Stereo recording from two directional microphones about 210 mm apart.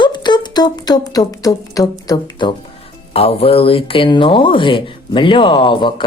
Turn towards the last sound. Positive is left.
turn(degrees=20)  # may be behind; listen again after turning